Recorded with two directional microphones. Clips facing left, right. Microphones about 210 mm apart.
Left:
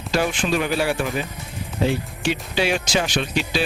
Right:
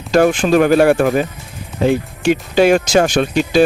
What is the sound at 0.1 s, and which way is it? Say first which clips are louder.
Speech: right 10 dB; 50° right (ahead or behind).